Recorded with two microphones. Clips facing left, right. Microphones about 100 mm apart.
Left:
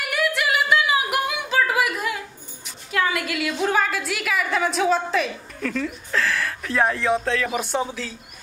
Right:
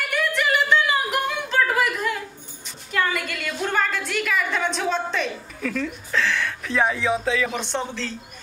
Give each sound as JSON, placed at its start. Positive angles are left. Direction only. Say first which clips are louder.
{"t": 0.0, "sound": "female singing", "louder": "even", "side_deg": 5}
{"t": 2.9, "sound": "a woman's voice", "louder": "left 1 dB", "side_deg": 5}